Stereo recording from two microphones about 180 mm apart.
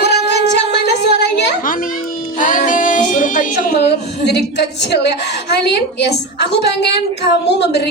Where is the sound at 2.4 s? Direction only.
50° left (ahead or behind).